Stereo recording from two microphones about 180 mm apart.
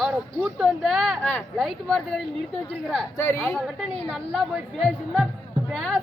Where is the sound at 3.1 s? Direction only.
15° left (ahead or behind).